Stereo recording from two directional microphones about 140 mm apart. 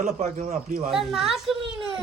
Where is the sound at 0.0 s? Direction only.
55° right (ahead or behind).